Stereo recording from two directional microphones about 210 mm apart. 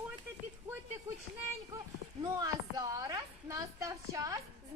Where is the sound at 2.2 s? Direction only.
20° right (ahead or behind).